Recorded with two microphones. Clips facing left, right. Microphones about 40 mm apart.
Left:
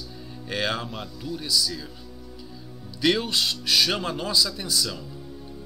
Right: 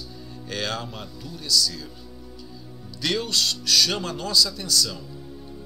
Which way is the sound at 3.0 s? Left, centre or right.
Centre.